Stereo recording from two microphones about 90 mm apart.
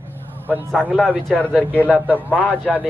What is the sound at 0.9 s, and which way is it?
Speech, 10° right (ahead or behind).